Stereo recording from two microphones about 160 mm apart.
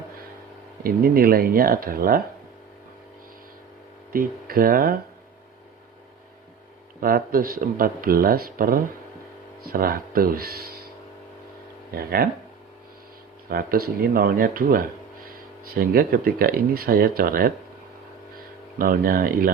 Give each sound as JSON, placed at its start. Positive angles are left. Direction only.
{"t": 0.9, "sound": "speech", "side_deg": -65}
{"t": 4.1, "sound": "speech", "side_deg": -65}
{"t": 7.0, "sound": "speech", "side_deg": -65}
{"t": 11.9, "sound": "speech", "side_deg": -70}
{"t": 13.5, "sound": "speech", "side_deg": -70}
{"t": 18.8, "sound": "speech", "side_deg": -65}